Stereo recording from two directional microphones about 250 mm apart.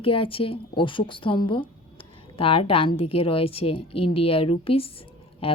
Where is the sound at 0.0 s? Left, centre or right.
Left.